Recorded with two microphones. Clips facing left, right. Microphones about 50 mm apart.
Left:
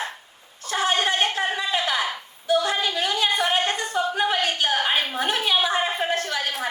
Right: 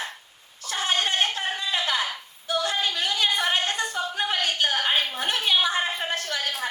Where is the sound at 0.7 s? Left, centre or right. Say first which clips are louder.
Left 3 dB; left.